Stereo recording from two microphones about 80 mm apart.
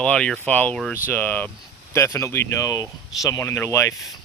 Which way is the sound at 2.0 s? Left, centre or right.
Left.